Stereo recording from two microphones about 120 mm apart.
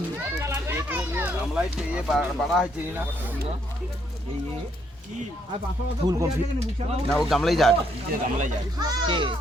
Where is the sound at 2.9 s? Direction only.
15° right (ahead or behind).